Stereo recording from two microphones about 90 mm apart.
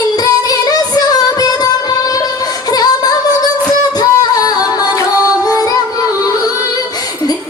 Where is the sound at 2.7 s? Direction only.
45° left (ahead or behind).